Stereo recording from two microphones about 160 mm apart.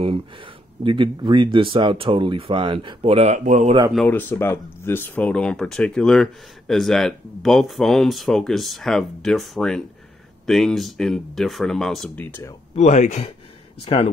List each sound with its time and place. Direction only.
0.8 s speech: 30° right (ahead or behind); by 3.7 s 50° right (ahead or behind)
4.1 s speech: 15° left (ahead or behind)
12.3 s speech: 15° left (ahead or behind)
12.7 s speech: 45° left (ahead or behind)